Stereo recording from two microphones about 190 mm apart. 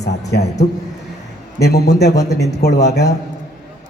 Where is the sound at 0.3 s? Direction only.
55° left (ahead or behind).